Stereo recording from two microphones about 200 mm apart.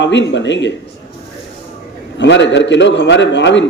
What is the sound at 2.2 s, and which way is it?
A man's voice, 65° left (ahead or behind).